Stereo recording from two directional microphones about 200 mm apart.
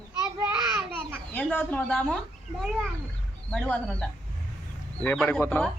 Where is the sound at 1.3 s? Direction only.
5° left (ahead or behind).